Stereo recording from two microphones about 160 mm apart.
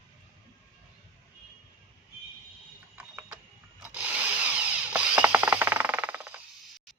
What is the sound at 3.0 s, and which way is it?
Tools, 10° right (ahead or behind).